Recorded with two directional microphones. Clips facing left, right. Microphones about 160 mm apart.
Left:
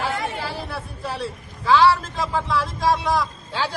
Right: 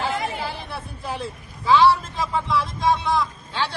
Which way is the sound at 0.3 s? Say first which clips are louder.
Left 1 dB; centre (ahead or behind).